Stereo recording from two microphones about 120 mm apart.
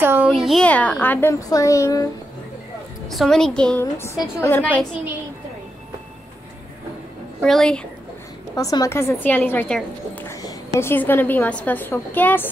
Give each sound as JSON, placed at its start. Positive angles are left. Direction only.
{"t": 0.0, "sound": "a sound", "side_deg": -20}
{"t": 0.3, "sound": "a woman's voice", "side_deg": 0}
{"t": 0.7, "sound": "a woman's voice", "side_deg": 10}
{"t": 1.3, "sound": "a woman's voice", "side_deg": 25}
{"t": 3.1, "sound": "a woman's voice", "side_deg": 5}
{"t": 3.8, "sound": "a woman's voice", "side_deg": 25}
{"t": 7.4, "sound": "a woman's voice", "side_deg": 5}
{"t": 8.5, "sound": "a woman's voice", "side_deg": 30}